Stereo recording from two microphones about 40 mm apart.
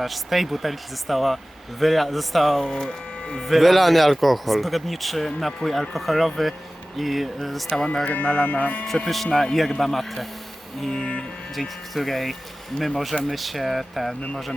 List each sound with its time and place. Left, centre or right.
0.0 s speech: centre
3.5 s speech: centre
8.0 s speech: left
9.0 s speech: centre
10.8 s music: centre
11.9 s speech: centre